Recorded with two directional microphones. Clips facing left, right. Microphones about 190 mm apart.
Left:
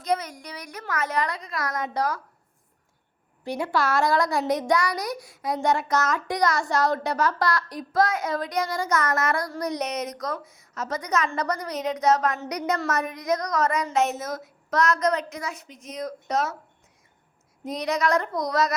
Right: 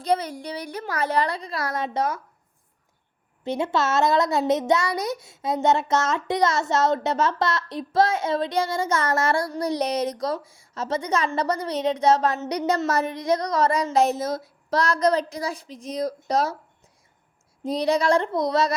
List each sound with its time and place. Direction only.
0.0 s a woman's voice: 30° right (ahead or behind)
3.4 s speech: 25° right (ahead or behind)
17.6 s speech: 30° right (ahead or behind)